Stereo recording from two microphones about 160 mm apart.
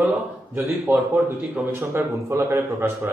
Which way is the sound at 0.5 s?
5° right (ahead or behind).